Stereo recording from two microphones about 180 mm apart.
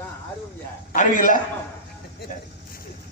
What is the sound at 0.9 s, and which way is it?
Speech, 45° left (ahead or behind).